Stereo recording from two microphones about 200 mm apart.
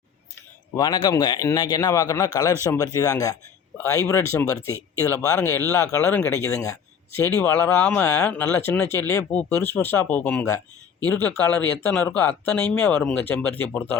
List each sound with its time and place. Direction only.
0.8 s a man's voice: 20° left (ahead or behind)